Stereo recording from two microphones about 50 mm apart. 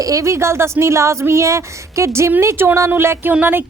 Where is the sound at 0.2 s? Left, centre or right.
Right.